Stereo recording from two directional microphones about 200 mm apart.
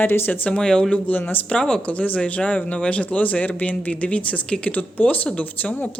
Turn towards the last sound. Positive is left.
turn(degrees=10)  # may be behind; listen again after turning